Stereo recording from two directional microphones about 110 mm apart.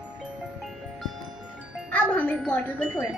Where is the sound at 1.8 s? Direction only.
15° left (ahead or behind).